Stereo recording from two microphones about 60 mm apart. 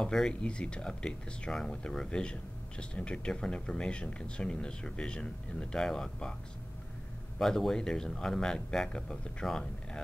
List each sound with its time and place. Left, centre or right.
0.0 s speech: centre
7.3 s speech: centre